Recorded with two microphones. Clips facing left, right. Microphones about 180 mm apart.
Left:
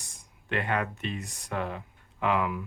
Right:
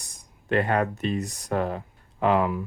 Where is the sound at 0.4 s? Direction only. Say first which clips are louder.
Right 7 dB; 40° right (ahead or behind).